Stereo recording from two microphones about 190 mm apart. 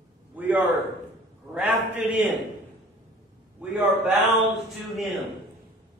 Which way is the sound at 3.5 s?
5° right (ahead or behind).